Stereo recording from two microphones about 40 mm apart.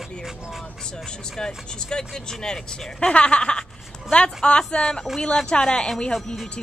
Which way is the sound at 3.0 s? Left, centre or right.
Left.